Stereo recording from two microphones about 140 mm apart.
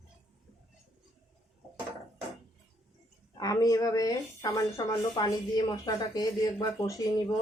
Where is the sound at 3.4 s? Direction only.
25° left (ahead or behind).